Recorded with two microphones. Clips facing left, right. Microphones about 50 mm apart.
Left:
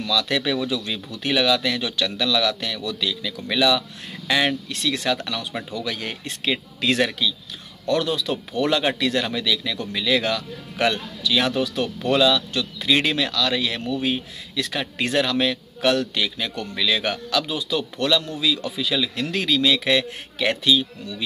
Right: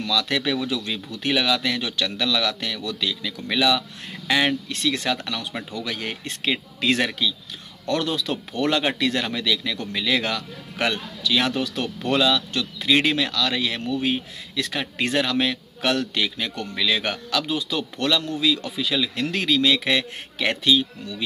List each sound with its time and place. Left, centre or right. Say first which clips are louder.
0.1 s a man's voice: left 1 dB; right
7.8 s a man's voice: left 2 dB; right
12.1 s a man's voice: left 2 dB; right
12.9 s a man's voice: right 1 dB; centre